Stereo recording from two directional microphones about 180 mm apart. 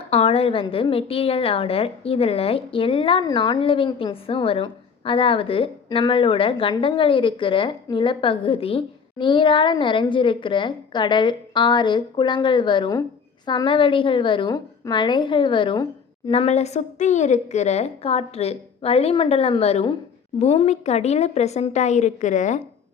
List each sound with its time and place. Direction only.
0.1 s a woman's voice: 35° left (ahead or behind)
16.3 s a woman's voice: 35° left (ahead or behind)